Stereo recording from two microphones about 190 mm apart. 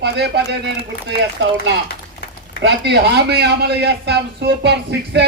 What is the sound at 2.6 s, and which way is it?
A man's voice, 60° right (ahead or behind).